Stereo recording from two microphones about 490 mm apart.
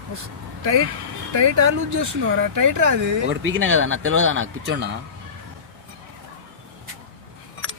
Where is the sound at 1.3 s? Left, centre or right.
Right.